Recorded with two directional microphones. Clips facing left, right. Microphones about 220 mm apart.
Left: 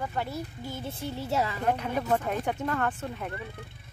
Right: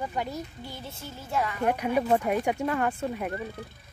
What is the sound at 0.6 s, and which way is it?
Music, 50° left (ahead or behind).